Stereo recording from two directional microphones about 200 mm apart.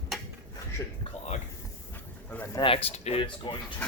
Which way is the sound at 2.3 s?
15° left (ahead or behind).